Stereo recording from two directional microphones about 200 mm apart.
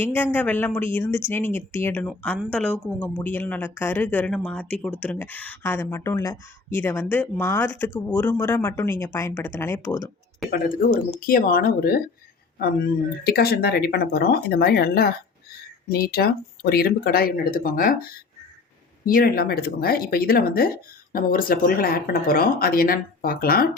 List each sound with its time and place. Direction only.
0.0 s speech: 10° left (ahead or behind)
11.3 s speech: 45° left (ahead or behind)
19.0 s speech: 50° left (ahead or behind)